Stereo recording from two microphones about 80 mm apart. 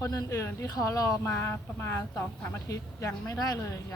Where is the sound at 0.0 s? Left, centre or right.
Left.